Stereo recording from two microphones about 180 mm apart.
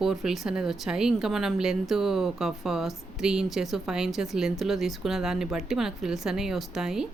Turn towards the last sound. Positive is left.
turn(degrees=-5)  # may be behind; listen again after turning